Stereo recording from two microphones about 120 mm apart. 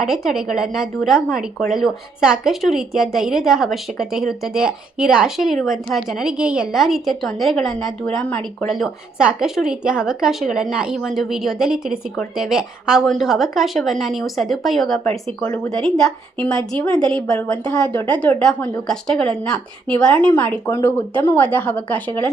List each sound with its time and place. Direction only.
0.0 s a woman's voice: 5° right (ahead or behind)
15.4 s speech: 20° left (ahead or behind)
15.7 s a woman's voice: 5° left (ahead or behind)